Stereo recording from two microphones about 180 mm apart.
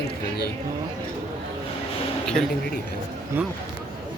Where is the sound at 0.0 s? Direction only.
65° left (ahead or behind).